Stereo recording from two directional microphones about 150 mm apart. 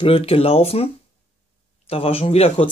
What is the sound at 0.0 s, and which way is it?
Speech, 40° left (ahead or behind).